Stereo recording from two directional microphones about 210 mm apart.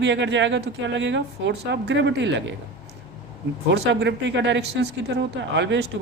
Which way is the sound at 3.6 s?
55° right (ahead or behind).